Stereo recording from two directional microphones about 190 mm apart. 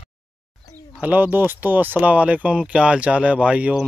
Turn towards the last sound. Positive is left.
turn(degrees=-5)  # may be behind; listen again after turning